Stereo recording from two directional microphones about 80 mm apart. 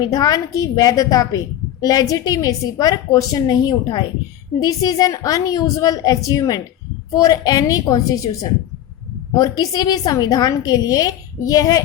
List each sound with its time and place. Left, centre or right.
0.0 s a woman's voice: left